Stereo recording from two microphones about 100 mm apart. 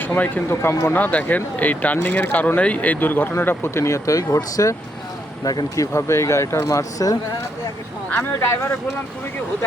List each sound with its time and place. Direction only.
0.0 s speech: 20° left (ahead or behind)
0.9 s speech: 15° left (ahead or behind); by 7.2 s 35° left (ahead or behind)
8.1 s speech: 25° left (ahead or behind)